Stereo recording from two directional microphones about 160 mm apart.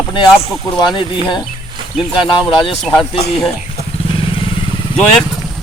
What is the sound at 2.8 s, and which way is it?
Speech, centre (ahead or behind).